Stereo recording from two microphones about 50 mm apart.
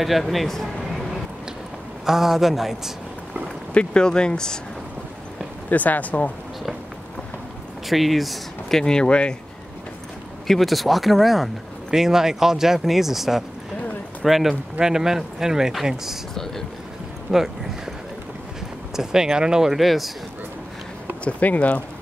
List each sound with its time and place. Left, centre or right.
0.0 s speech: centre
2.0 s speech: centre
3.7 s speech: centre
5.7 s speech: left
7.9 s speech: centre; by 9.3 s left
10.4 s speech: centre
17.3 s a sound: centre
18.9 s speech: centre
21.2 s speech: left